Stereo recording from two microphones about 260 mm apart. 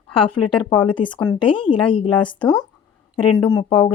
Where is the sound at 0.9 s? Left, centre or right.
Centre.